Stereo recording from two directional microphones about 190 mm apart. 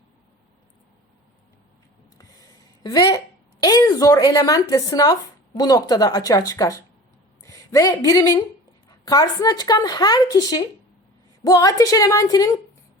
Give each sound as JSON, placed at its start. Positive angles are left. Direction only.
{"t": 2.8, "sound": "a woman's voice", "side_deg": 20}